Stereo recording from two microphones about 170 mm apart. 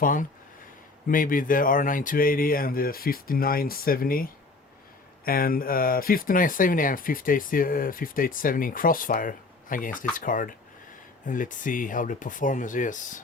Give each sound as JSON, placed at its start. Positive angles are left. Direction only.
{"t": 0.0, "sound": "speech", "side_deg": 50}